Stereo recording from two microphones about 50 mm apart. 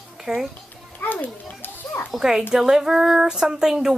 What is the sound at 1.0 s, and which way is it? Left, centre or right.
Speech, left.